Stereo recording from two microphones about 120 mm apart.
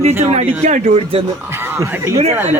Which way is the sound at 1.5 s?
20° right (ahead or behind).